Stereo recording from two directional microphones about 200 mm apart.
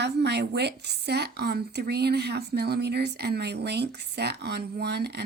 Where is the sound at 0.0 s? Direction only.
55° right (ahead or behind).